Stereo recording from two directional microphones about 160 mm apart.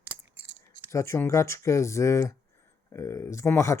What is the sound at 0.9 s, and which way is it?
Speech, 15° left (ahead or behind).